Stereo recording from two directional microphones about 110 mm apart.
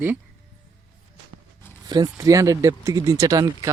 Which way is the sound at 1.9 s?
35° right (ahead or behind).